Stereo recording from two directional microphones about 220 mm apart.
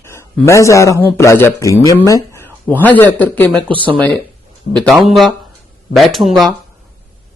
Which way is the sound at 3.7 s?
20° right (ahead or behind).